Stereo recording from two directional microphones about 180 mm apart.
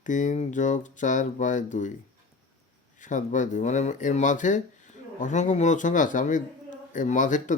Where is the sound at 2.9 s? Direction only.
45° left (ahead or behind).